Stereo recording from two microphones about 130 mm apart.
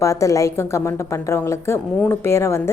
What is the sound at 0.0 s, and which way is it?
A woman's voice, 25° left (ahead or behind).